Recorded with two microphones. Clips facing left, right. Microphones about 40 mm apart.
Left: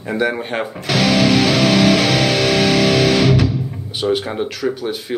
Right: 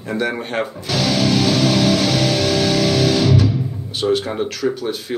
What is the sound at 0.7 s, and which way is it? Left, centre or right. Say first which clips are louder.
Music: left 6 dB; left.